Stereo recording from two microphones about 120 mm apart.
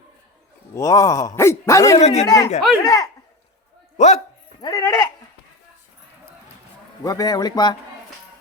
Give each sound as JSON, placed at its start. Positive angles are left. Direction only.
{"t": 0.7, "sound": "speech", "side_deg": 25}
{"t": 2.0, "sound": "speech", "side_deg": 65}
{"t": 2.2, "sound": "speech", "side_deg": 30}
{"t": 3.9, "sound": "a man's voice", "side_deg": 75}
{"t": 4.6, "sound": "speech", "side_deg": 30}
{"t": 7.0, "sound": "a man's voice", "side_deg": 30}